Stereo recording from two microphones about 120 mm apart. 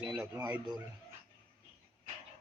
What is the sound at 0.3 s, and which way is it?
Speech, 35° right (ahead or behind).